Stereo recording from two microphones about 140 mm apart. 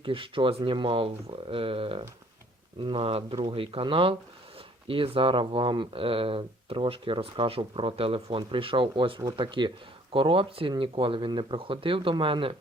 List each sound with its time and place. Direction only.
0.0 s speech: 40° right (ahead or behind)